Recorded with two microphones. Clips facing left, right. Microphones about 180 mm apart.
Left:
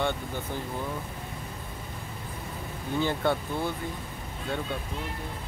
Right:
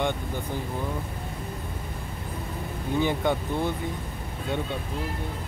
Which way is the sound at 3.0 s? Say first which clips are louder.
Right 2 dB; 15° right (ahead or behind).